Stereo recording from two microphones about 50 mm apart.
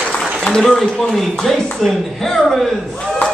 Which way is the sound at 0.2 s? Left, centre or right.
Centre.